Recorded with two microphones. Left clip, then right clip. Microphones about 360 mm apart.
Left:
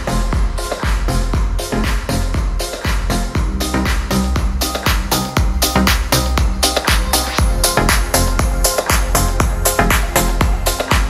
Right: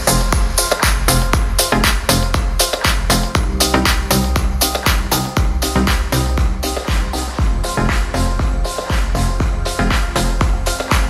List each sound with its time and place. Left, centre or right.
0.0 s music: right
1.7 s music: right; by 6.7 s centre
7.6 s music: left
9.8 s music: centre